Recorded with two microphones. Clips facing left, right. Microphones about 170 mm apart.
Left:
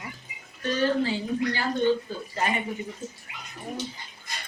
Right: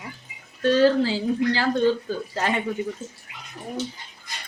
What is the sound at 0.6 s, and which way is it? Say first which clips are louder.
A woman's voice: right 7 dB; 90° right.